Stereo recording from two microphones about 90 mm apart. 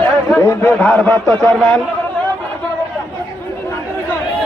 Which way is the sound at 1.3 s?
40° right (ahead or behind).